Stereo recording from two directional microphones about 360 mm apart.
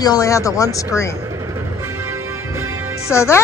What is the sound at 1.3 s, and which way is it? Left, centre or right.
Train, centre.